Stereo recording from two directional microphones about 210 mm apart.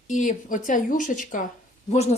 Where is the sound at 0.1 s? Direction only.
35° left (ahead or behind).